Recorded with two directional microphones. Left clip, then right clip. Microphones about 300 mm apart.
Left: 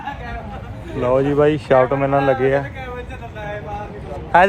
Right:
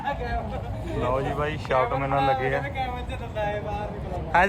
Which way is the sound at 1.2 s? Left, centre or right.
Centre.